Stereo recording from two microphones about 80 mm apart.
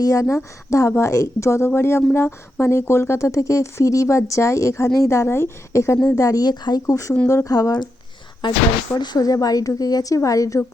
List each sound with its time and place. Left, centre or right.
0.0 s a woman's voice: left
6.8 s speech: left
8.4 s speech: left
9.0 s speech: left